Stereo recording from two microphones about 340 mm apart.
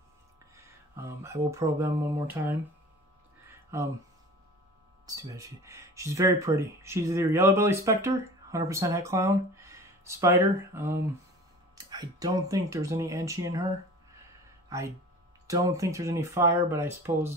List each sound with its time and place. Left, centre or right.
0.6 s a sound: centre
3.4 s music: centre
5.0 s speech: centre
15.4 s speech: centre